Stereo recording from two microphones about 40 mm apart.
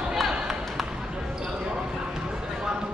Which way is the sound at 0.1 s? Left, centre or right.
Centre.